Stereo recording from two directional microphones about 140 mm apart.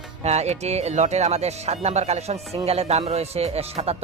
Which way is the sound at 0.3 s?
50° right (ahead or behind).